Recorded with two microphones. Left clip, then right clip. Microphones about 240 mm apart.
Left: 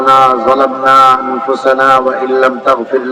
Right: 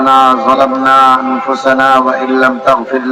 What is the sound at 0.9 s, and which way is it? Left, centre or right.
Speech, left.